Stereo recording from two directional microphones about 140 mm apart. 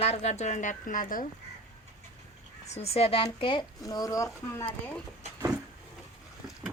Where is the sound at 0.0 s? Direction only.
50° left (ahead or behind); by 1.3 s 75° left (ahead or behind).